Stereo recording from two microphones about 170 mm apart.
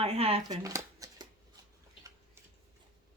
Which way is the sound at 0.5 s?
20° right (ahead or behind).